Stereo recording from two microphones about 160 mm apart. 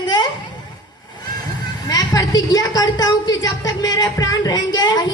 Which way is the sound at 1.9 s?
20° left (ahead or behind).